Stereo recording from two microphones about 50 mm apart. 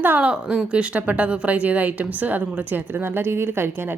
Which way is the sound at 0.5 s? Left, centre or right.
Right.